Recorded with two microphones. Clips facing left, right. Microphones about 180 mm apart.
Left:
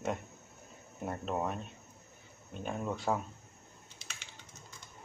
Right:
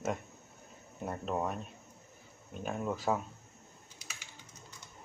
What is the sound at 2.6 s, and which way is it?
Speech, 5° right (ahead or behind).